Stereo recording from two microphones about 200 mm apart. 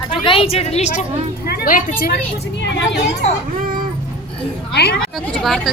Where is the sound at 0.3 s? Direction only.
25° left (ahead or behind); by 2.1 s 45° left (ahead or behind).